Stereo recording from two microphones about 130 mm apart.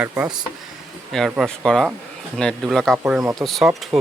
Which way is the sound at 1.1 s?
Centre (ahead or behind).